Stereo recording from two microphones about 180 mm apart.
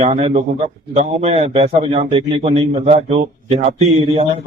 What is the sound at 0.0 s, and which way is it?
A man's voice, 35° right (ahead or behind).